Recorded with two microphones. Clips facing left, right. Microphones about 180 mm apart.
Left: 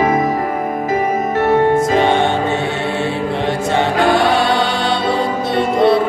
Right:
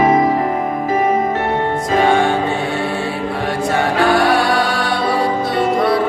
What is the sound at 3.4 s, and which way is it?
Music, 25° left (ahead or behind).